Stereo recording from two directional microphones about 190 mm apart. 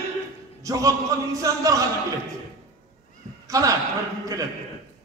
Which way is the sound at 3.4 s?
15° right (ahead or behind).